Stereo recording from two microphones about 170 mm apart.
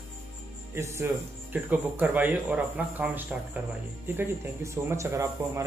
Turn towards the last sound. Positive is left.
turn(degrees=-15)  # may be behind; listen again after turning